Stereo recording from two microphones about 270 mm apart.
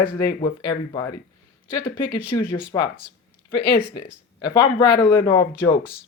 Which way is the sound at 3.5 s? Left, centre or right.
Left.